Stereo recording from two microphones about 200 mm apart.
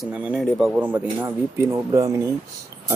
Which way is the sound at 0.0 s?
Centre (ahead or behind).